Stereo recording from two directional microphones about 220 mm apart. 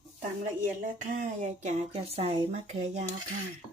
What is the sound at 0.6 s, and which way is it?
Speech, 35° right (ahead or behind).